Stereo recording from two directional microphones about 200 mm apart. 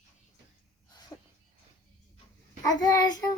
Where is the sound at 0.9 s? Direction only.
20° left (ahead or behind).